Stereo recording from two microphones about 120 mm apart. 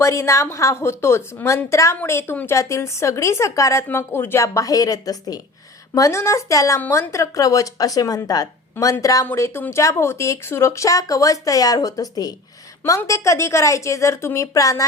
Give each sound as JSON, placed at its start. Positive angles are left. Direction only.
{"t": 0.0, "sound": "speech", "side_deg": 25}